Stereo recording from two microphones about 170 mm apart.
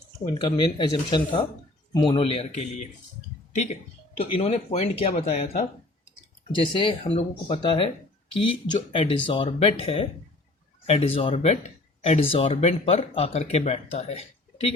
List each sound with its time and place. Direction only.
0.3 s speech: 30° left (ahead or behind)
6.7 s speech: 30° left (ahead or behind)